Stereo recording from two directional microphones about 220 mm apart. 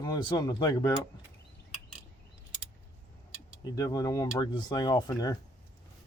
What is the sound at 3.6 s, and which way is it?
Speech, 15° left (ahead or behind).